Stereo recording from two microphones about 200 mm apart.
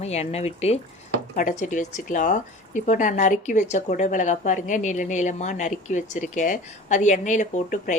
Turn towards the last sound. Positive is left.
turn(degrees=40)  # may be behind; listen again after turning